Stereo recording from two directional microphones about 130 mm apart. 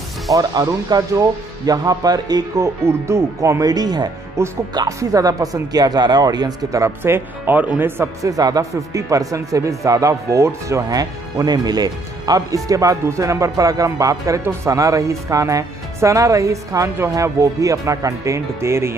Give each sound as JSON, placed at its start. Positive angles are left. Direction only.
{"t": 0.3, "sound": "speech", "side_deg": -30}